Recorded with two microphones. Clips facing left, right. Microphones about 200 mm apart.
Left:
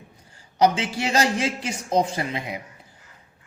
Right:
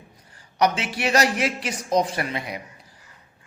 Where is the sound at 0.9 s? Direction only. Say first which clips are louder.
Right 1 dB; 25° left (ahead or behind).